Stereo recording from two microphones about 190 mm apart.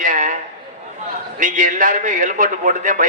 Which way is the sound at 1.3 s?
40° right (ahead or behind).